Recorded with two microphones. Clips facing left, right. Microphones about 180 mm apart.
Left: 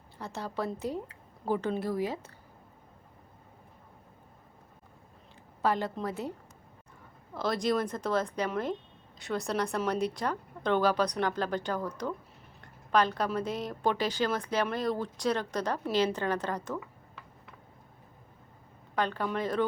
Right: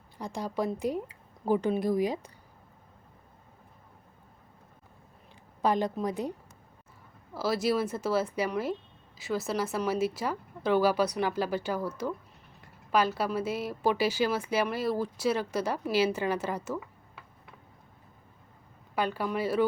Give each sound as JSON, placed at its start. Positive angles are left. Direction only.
{"t": 0.2, "sound": "a woman's voice", "side_deg": -15}
{"t": 5.6, "sound": "a woman's voice", "side_deg": -15}
{"t": 7.3, "sound": "a woman's voice", "side_deg": -5}
{"t": 18.9, "sound": "a woman's voice", "side_deg": -10}